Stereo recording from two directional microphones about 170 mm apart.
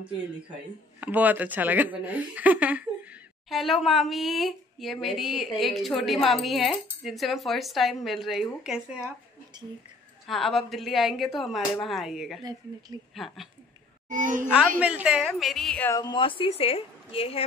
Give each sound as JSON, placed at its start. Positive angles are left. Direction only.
{"t": 1.0, "sound": "speech", "side_deg": -10}
{"t": 10.2, "sound": "speech", "side_deg": 0}
{"t": 14.0, "sound": "a child's voice", "side_deg": -50}
{"t": 14.8, "sound": "speech", "side_deg": -5}
{"t": 15.9, "sound": "speech", "side_deg": 25}